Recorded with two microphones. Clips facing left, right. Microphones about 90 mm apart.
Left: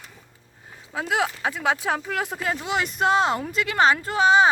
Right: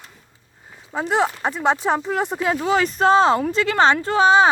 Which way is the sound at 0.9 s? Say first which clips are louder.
Right 4 dB; 20° right (ahead or behind).